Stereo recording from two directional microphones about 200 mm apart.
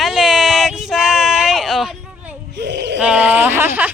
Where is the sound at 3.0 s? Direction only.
10° right (ahead or behind).